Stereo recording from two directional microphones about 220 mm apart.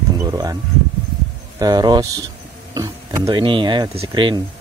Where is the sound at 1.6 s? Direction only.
20° right (ahead or behind).